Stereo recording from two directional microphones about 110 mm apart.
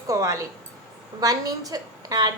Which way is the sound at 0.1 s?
30° right (ahead or behind).